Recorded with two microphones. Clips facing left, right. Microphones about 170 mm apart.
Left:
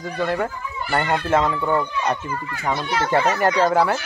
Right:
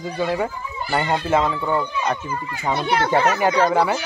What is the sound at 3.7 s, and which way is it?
Speech, centre (ahead or behind).